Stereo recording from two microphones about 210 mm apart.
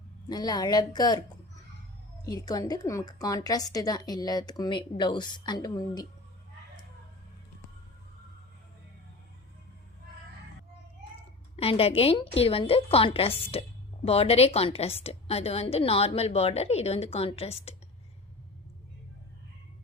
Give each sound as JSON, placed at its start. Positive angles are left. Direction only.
{"t": 0.3, "sound": "a woman's voice", "side_deg": 20}
{"t": 2.2, "sound": "a woman's voice", "side_deg": 20}
{"t": 11.5, "sound": "a woman's voice", "side_deg": 30}